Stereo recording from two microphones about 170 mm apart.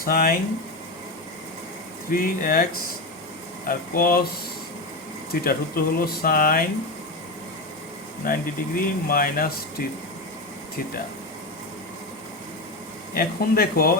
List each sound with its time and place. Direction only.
0.0 s speech: 60° left (ahead or behind)
2.0 s speech: 55° left (ahead or behind)
3.7 s speech: 60° left (ahead or behind)
5.3 s speech: 60° left (ahead or behind)
8.2 s speech: 55° left (ahead or behind)
13.1 s speech: 60° left (ahead or behind)